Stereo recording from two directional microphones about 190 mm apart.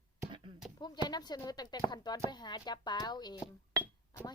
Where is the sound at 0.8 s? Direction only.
20° left (ahead or behind).